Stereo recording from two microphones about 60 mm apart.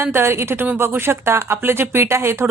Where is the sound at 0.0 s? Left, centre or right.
Right.